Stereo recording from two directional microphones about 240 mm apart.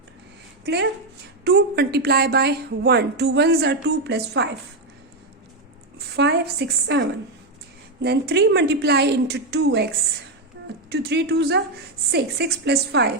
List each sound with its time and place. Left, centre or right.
0.6 s a woman's voice: right
6.1 s a woman's voice: right
10.8 s a woman's voice: right